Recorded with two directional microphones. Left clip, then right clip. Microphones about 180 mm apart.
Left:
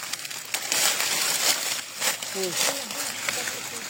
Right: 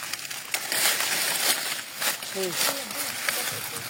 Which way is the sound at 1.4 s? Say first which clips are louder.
Left 1 dB; 35° left (ahead or behind).